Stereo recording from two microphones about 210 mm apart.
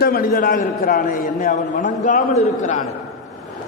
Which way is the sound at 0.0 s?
45° left (ahead or behind).